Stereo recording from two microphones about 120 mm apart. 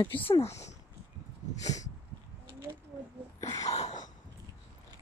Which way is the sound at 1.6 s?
75° left (ahead or behind).